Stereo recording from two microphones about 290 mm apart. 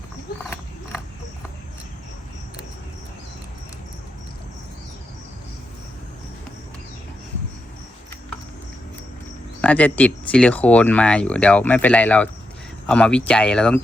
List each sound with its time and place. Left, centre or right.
9.6 s speech: centre